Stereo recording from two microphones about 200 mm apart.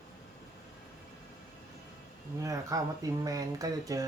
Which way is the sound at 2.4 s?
15° right (ahead or behind).